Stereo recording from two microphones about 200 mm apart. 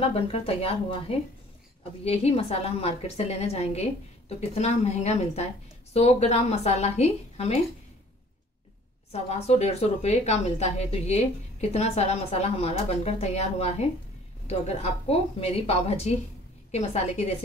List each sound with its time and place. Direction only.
0.0 s a woman's voice: 30° left (ahead or behind)
9.1 s a woman's voice: 30° left (ahead or behind)